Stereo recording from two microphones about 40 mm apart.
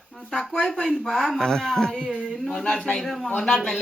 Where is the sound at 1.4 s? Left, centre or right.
Centre.